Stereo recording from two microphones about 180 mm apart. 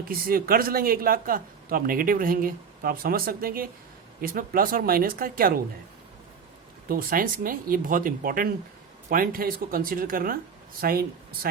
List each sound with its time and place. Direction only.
0.0 s speech: 55° right (ahead or behind)
6.8 s speech: 50° right (ahead or behind)